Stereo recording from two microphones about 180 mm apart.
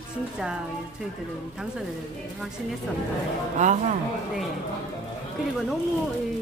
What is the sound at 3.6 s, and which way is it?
Speech, 40° right (ahead or behind).